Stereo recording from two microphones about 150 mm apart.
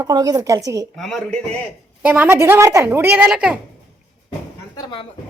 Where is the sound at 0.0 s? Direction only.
25° right (ahead or behind).